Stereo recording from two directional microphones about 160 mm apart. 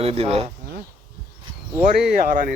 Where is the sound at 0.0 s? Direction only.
40° right (ahead or behind).